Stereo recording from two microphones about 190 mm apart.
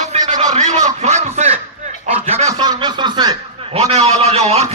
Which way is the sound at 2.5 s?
20° right (ahead or behind).